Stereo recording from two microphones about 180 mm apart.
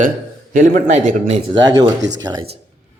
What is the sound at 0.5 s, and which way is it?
Speech, 50° right (ahead or behind).